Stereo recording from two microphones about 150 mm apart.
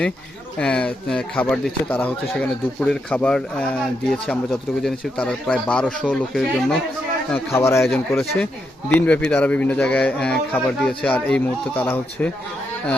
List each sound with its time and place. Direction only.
0.6 s speech: 5° left (ahead or behind)
7.3 s speech: 15° left (ahead or behind)
7.8 s speech: 5° left (ahead or behind)